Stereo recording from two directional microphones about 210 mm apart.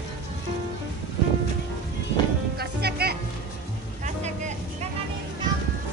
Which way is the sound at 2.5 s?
50° right (ahead or behind).